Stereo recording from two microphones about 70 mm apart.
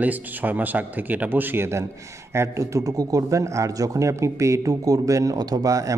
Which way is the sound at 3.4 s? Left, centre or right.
Right.